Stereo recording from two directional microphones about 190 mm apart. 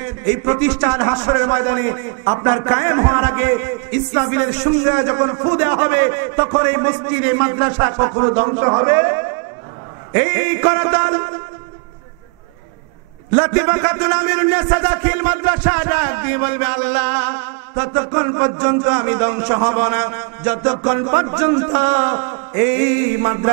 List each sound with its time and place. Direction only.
0.0 s a man's voice: 15° right (ahead or behind)
13.4 s a man's voice: 15° right (ahead or behind)
23.2 s a man's voice: 30° right (ahead or behind)